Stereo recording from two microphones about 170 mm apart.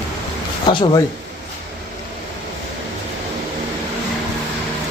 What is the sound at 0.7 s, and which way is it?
Speech, 25° left (ahead or behind).